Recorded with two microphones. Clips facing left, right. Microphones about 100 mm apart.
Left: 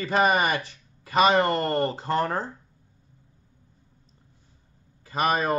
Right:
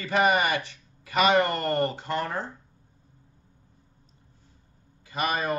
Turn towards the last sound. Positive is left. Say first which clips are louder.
# left 4 dB
turn(degrees=35)  # may be behind; listen again after turning